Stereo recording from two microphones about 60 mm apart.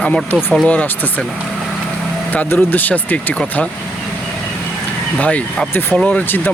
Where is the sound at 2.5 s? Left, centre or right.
Left.